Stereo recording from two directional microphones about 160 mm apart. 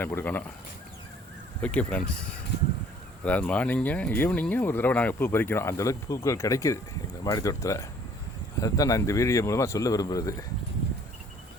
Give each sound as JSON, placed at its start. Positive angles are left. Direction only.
{"t": 0.0, "sound": "speech", "side_deg": 15}
{"t": 1.6, "sound": "a man's voice", "side_deg": 10}